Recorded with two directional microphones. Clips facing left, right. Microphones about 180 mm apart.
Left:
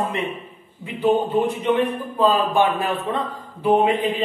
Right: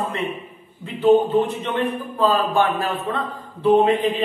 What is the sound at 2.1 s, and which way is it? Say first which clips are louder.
A woman's voice: left 1 dB; 15° left (ahead or behind).